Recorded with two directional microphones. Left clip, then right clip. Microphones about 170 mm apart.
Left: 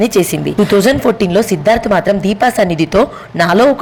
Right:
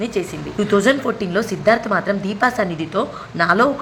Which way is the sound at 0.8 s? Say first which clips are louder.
Left 6 dB; 35° left (ahead or behind).